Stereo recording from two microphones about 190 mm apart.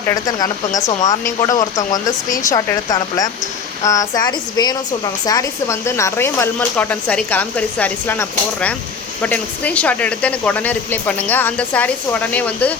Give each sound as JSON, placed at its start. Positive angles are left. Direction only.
{"t": 0.1, "sound": "speech", "side_deg": 20}